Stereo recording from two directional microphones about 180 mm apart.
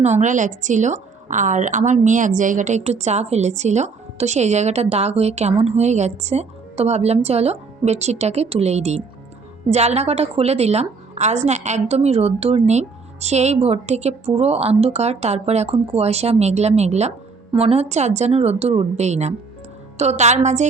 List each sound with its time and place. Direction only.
0.0 s a woman's voice: 40° right (ahead or behind)